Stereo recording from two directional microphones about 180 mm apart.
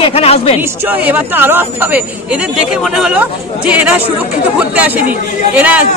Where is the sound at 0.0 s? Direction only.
35° left (ahead or behind).